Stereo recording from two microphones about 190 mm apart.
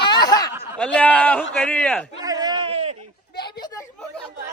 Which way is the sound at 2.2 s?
20° right (ahead or behind).